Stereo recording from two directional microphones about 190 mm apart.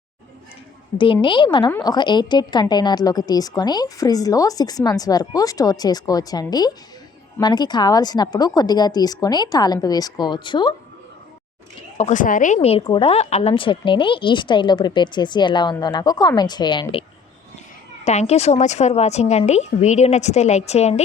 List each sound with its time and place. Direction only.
0.9 s a woman's voice: 25° left (ahead or behind)
11.9 s a woman's voice: 40° left (ahead or behind)
12.5 s a woman's voice: 30° left (ahead or behind)
18.0 s a woman's voice: 35° left (ahead or behind)